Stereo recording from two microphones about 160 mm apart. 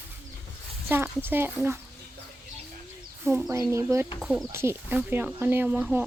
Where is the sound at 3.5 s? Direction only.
20° right (ahead or behind).